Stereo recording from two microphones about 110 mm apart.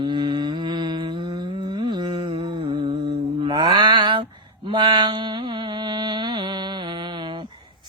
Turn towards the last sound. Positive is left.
turn(degrees=-45)  # may be behind; listen again after turning